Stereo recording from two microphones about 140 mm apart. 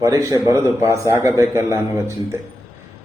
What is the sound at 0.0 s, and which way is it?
A man's voice, 25° right (ahead or behind).